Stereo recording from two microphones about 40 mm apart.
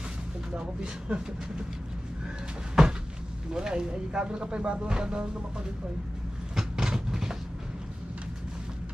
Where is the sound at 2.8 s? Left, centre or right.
Centre.